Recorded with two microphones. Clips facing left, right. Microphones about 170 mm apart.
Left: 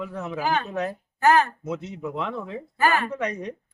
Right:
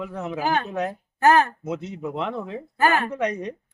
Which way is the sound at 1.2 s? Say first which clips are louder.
Right 1 dB; 45° right (ahead or behind).